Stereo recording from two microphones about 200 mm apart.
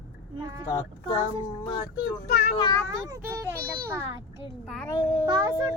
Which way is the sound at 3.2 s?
10° right (ahead or behind).